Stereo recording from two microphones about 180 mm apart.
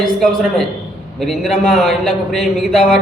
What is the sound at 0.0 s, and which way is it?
A man's voice, centre (ahead or behind).